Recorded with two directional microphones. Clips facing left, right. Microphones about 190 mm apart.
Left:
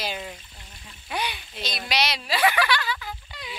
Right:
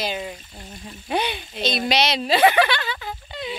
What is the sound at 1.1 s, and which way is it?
Speech, 25° right (ahead or behind).